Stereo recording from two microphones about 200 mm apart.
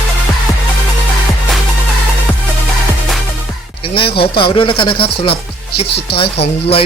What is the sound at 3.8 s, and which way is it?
Speech, 25° left (ahead or behind).